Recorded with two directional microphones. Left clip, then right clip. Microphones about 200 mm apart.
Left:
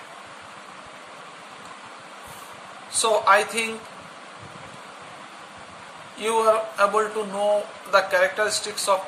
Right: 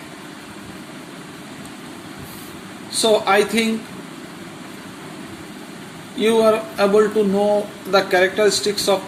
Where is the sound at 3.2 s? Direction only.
25° left (ahead or behind).